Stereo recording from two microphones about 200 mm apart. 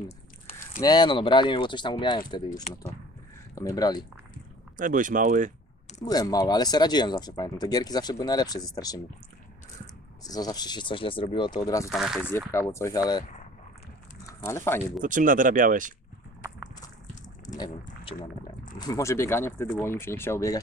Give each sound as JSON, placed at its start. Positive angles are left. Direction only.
{"t": 0.7, "sound": "speech", "side_deg": 20}
{"t": 3.7, "sound": "speech", "side_deg": 20}
{"t": 4.7, "sound": "speech", "side_deg": -40}
{"t": 6.0, "sound": "speech", "side_deg": 20}
{"t": 10.2, "sound": "speech", "side_deg": 20}
{"t": 11.9, "sound": "speech", "side_deg": 0}
{"t": 12.3, "sound": "speech", "side_deg": 10}
{"t": 14.4, "sound": "speech", "side_deg": 10}
{"t": 15.0, "sound": "speech", "side_deg": -40}
{"t": 17.6, "sound": "speech", "side_deg": 25}